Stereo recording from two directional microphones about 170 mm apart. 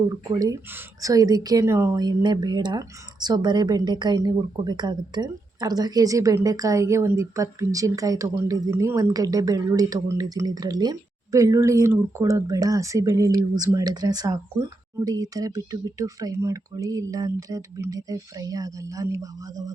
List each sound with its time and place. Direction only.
0.1 s speech: 20° right (ahead or behind)